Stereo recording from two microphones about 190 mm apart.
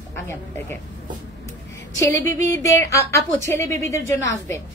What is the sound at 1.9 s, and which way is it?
A woman's voice, 15° left (ahead or behind).